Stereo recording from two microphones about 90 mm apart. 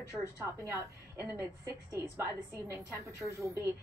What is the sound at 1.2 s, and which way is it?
A woman's voice, 25° right (ahead or behind).